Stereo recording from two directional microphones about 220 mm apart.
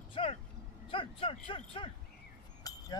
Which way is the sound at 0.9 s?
25° left (ahead or behind).